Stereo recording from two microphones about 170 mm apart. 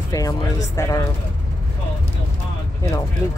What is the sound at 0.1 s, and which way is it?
Speech, 20° left (ahead or behind).